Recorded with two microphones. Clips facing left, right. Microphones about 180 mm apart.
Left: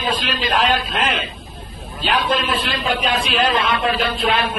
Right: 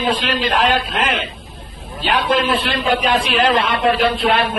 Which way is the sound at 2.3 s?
60° right (ahead or behind).